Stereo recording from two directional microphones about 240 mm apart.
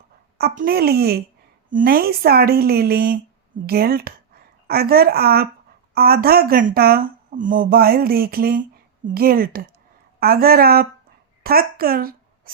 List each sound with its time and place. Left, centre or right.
0.3 s speech: right